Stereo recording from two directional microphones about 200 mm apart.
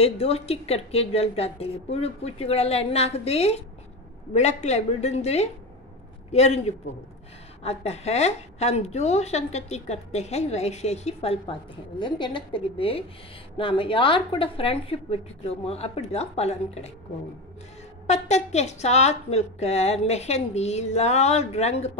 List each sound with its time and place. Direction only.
0.0 s a woman's voice: 30° left (ahead or behind)
18.0 s a woman's voice: 35° left (ahead or behind)